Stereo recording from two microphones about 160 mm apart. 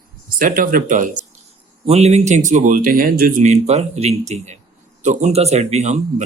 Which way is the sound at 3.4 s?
45° right (ahead or behind).